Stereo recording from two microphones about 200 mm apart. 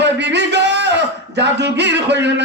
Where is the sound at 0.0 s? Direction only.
60° right (ahead or behind).